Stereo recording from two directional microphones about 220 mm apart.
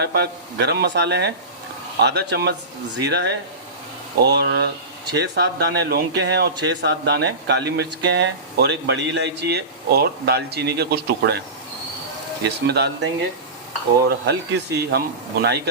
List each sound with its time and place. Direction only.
0.0 s speech: 50° right (ahead or behind)
12.6 s speech: 50° right (ahead or behind)
14.1 s speech: 50° right (ahead or behind)